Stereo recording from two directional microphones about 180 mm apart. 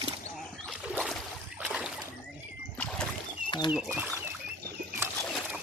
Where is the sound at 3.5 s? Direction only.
25° left (ahead or behind).